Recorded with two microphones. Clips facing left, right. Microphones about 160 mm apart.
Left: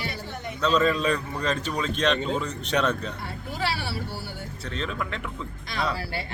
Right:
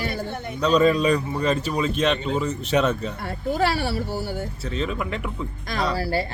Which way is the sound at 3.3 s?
45° right (ahead or behind).